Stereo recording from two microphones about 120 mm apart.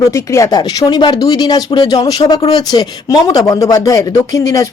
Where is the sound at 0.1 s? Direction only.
25° left (ahead or behind).